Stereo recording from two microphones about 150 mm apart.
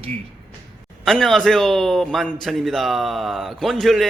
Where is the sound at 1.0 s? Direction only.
5° left (ahead or behind).